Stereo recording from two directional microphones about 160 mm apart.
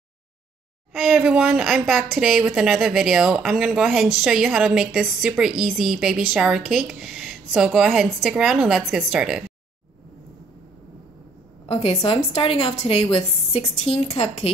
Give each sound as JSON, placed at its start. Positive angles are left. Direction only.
{"t": 0.9, "sound": "speech", "side_deg": 0}
{"t": 11.6, "sound": "a woman's voice", "side_deg": 35}